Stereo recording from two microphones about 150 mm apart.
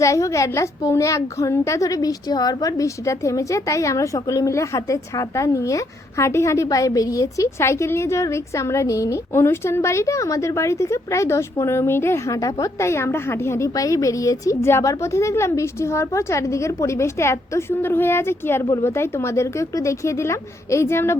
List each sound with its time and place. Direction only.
0.0 s a woman's voice: 20° left (ahead or behind)